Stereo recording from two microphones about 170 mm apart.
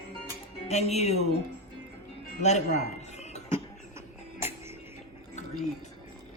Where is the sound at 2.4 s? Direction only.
40° left (ahead or behind).